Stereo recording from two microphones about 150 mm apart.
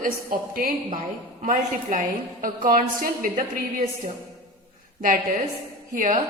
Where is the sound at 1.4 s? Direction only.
55° right (ahead or behind).